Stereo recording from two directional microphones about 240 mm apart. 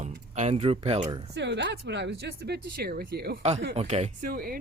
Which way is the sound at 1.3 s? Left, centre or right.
Right.